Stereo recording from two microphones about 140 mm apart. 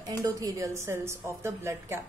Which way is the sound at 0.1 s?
25° right (ahead or behind).